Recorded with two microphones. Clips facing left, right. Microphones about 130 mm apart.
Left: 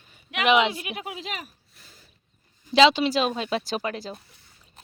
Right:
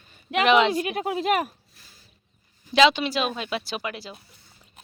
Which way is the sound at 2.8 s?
30° left (ahead or behind).